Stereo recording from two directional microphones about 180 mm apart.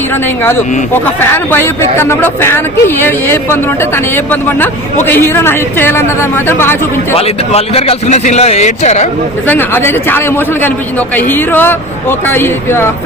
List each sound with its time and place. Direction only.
1.0 s speech: 10° left (ahead or behind)
7.2 s speech: 35° left (ahead or behind)
9.5 s speech: 10° left (ahead or behind)